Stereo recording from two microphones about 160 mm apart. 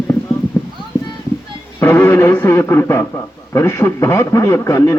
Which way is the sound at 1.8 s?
15° left (ahead or behind).